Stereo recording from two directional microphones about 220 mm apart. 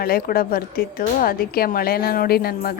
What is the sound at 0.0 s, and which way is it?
A woman's voice, 40° left (ahead or behind).